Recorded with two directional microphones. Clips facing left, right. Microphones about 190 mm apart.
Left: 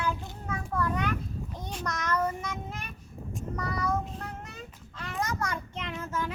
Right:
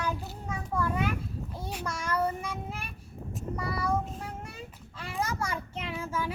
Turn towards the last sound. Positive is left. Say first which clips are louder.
# right 1 dB
turn(degrees=-10)  # may be behind; listen again after turning